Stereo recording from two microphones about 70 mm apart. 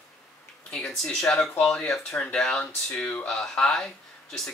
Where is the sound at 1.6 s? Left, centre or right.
Centre.